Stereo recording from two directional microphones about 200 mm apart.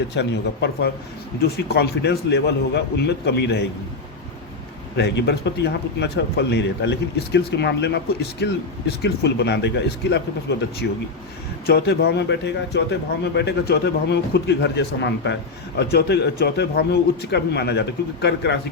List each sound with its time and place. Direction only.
0.1 s a man's voice: 60° left (ahead or behind)
4.9 s a man's voice: 55° left (ahead or behind)